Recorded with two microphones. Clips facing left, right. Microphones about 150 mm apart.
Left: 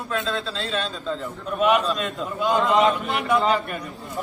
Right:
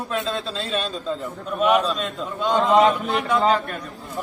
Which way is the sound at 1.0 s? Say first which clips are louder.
Right 1 dB; centre (ahead or behind).